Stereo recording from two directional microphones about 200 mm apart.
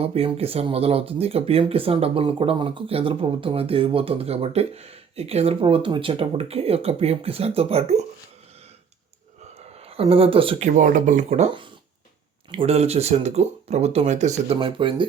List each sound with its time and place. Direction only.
0.0 s speech: 30° right (ahead or behind)
9.6 s speech: 30° right (ahead or behind)